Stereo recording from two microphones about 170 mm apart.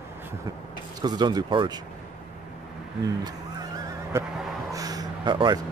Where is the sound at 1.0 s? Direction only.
25° right (ahead or behind).